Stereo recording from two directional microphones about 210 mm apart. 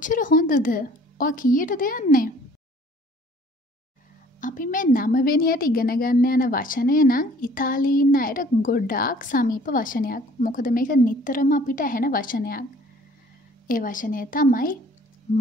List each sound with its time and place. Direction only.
0.0 s a woman's voice: 40° left (ahead or behind)
4.4 s a woman's voice: 40° left (ahead or behind)
13.7 s a woman's voice: 40° left (ahead or behind)
15.3 s sine wave: 35° left (ahead or behind)